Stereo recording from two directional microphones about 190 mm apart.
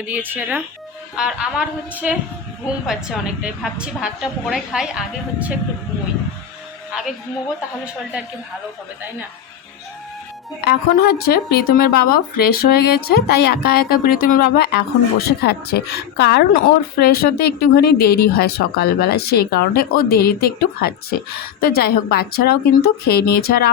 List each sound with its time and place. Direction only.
0.1 s a woman's voice: 10° right (ahead or behind)
10.6 s speech: 55° left (ahead or behind)